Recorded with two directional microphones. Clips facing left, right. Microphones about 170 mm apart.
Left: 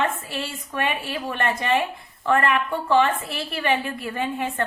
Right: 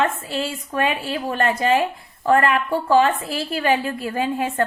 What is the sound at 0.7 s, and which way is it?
A woman's voice, 45° right (ahead or behind).